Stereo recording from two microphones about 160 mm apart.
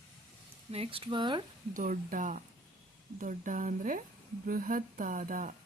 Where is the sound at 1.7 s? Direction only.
60° right (ahead or behind).